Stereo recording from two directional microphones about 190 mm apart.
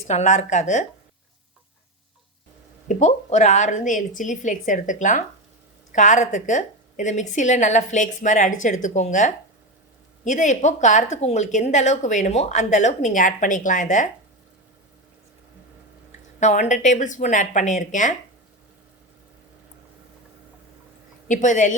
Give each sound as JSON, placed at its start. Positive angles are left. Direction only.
{"t": 0.1, "sound": "speech", "side_deg": 35}
{"t": 2.8, "sound": "speech", "side_deg": 40}
{"t": 16.4, "sound": "speech", "side_deg": 40}
{"t": 21.2, "sound": "speech", "side_deg": 40}